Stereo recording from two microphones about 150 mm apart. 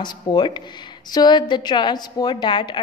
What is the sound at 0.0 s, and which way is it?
Speech, 30° left (ahead or behind).